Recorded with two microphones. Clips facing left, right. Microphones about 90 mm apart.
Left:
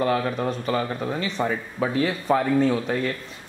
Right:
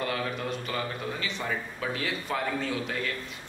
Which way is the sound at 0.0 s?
35° left (ahead or behind).